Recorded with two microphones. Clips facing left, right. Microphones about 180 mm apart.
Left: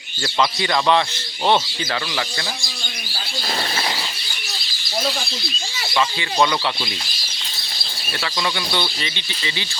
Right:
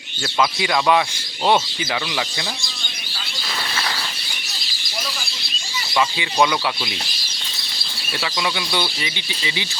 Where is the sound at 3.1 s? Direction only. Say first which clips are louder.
Left 4 dB; 40° left (ahead or behind).